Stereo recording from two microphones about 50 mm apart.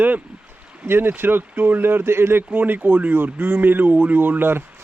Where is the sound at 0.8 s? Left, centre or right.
Right.